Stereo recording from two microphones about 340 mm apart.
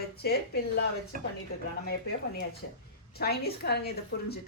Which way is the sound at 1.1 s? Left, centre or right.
Right.